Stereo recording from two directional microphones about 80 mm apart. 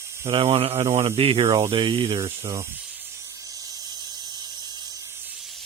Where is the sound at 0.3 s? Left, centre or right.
Right.